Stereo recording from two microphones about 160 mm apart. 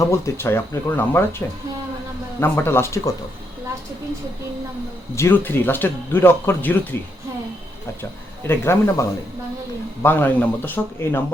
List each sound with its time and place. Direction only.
0.0 s speech: 15° left (ahead or behind)
2.4 s speech: 15° left (ahead or behind)
5.1 s speech: 15° left (ahead or behind)
8.4 s speech: 15° left (ahead or behind)